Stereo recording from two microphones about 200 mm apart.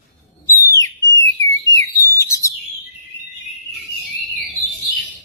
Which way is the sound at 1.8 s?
15° left (ahead or behind).